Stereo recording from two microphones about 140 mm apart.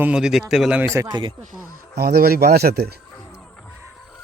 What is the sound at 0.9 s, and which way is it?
Speech, 30° right (ahead or behind).